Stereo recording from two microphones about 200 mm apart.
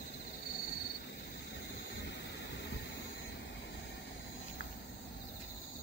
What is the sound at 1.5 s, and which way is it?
Vehicle, 60° left (ahead or behind).